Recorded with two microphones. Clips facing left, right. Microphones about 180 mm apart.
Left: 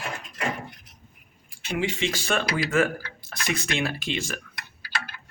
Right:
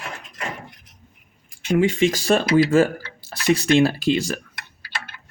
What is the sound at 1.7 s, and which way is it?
Speech, 45° right (ahead or behind).